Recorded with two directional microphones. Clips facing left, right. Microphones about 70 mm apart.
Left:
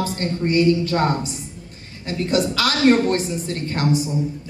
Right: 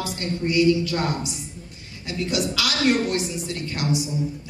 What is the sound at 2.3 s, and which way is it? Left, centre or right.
A woman's voice, left.